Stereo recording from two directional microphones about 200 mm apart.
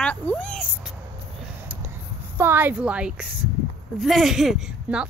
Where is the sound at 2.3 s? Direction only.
10° right (ahead or behind).